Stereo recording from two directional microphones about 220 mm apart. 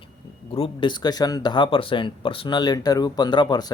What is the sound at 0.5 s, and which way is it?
Speech, 25° left (ahead or behind).